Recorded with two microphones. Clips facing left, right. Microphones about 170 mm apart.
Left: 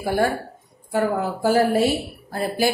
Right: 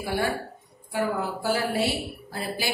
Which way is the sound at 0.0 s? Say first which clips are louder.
Left 6 dB; 45° left (ahead or behind).